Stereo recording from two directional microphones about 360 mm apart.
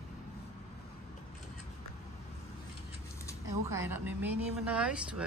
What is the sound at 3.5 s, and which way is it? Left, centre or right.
Speech, centre.